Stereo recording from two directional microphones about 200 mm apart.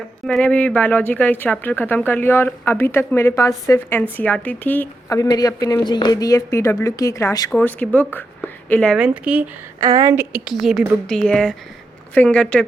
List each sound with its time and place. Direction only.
0.3 s speech: 5° left (ahead or behind)
9.0 s a woman's voice: 5° right (ahead or behind)